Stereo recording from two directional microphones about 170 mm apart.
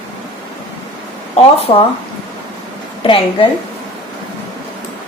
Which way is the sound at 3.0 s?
30° left (ahead or behind).